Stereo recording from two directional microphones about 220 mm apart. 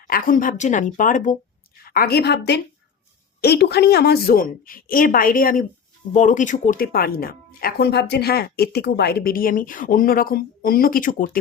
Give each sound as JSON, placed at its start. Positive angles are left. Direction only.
{"t": 0.1, "sound": "a woman's voice", "side_deg": 40}